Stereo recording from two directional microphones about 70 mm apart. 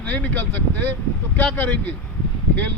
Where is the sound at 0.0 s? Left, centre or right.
Left.